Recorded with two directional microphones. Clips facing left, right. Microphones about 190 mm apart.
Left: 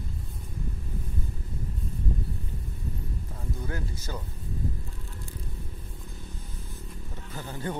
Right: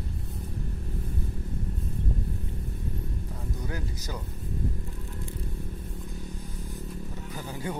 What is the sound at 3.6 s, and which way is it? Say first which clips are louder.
Speech: even; 15° right (ahead or behind).